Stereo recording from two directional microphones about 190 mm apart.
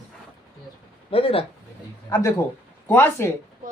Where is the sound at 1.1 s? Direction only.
30° left (ahead or behind).